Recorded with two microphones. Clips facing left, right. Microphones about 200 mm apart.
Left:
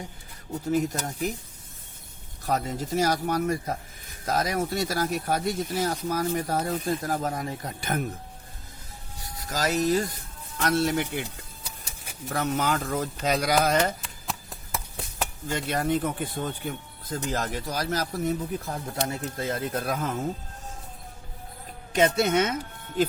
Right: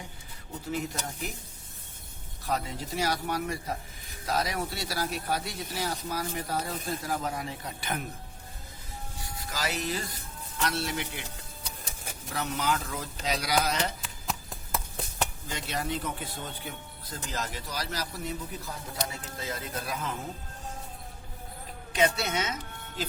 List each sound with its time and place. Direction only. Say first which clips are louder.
0.7 s speech: left 7 dB; 45° left (ahead or behind)
2.4 s speech: left 5 dB; 45° left (ahead or behind)
9.5 s speech: left 9 dB; 45° left (ahead or behind)
12.3 s speech: left 4 dB; 50° left (ahead or behind)
14.0 s a sound: even; centre (ahead or behind)
15.4 s speech: left 11 dB; 50° left (ahead or behind)
21.9 s speech: left 6 dB; 50° left (ahead or behind)